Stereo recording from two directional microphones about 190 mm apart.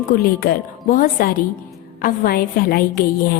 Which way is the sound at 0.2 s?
50° left (ahead or behind).